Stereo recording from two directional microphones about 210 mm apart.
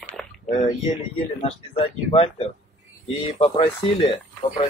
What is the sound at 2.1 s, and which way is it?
Speech, 30° left (ahead or behind).